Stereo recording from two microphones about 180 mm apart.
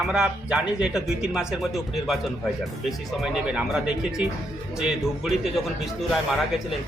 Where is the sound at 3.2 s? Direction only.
5° right (ahead or behind).